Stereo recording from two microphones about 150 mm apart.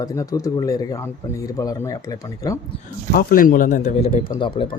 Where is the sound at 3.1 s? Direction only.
75° left (ahead or behind).